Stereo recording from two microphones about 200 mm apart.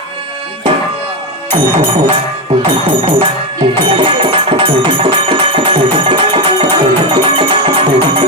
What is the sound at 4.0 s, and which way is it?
Music, 25° right (ahead or behind).